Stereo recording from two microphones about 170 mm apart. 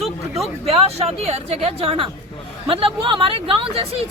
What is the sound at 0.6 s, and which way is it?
Speech, 35° right (ahead or behind).